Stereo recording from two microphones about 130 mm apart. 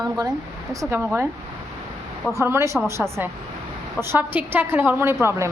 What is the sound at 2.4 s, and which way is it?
Speech, 20° right (ahead or behind).